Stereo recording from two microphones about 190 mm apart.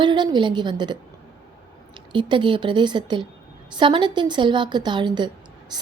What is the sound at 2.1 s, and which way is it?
A woman's voice, 25° right (ahead or behind).